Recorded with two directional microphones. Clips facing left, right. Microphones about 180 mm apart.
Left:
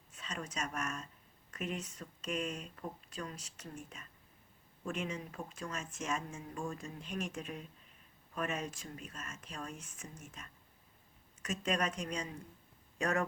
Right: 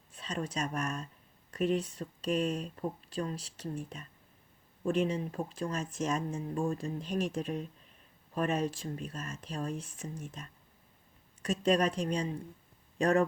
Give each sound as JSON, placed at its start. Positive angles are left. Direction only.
{"t": 0.1, "sound": "speech", "side_deg": -35}